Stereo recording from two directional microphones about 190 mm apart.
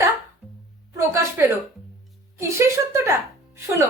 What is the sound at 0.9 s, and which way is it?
A woman's voice, 15° right (ahead or behind).